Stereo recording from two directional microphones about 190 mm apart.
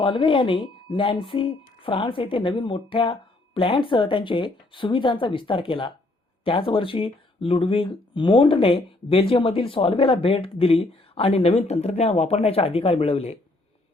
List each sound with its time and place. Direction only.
0.0 s speech: 25° left (ahead or behind)